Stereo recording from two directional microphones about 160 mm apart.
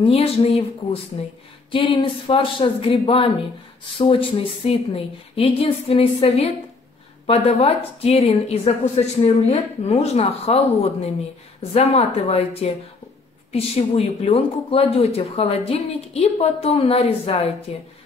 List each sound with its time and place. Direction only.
0.0 s speech: 35° left (ahead or behind)